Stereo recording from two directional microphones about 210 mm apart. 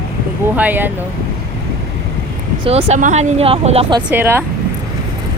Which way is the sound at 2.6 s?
30° right (ahead or behind).